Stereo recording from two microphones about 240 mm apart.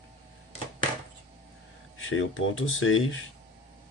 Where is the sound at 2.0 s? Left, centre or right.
Left.